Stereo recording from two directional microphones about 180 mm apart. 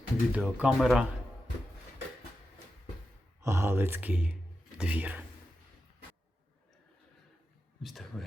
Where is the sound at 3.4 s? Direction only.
15° right (ahead or behind).